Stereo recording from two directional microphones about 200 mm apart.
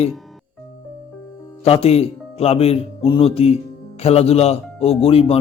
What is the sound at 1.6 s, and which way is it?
Speech, 30° left (ahead or behind).